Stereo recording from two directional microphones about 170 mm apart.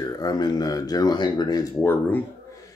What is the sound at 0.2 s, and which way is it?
Speech, 25° left (ahead or behind).